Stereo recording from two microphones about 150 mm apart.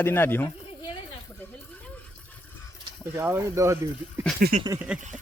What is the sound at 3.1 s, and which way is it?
Speech, 15° right (ahead or behind).